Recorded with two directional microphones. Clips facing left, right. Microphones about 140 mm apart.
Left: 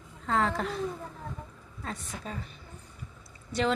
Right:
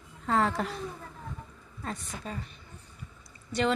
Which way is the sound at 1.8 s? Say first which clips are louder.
Right 1 dB; centre (ahead or behind).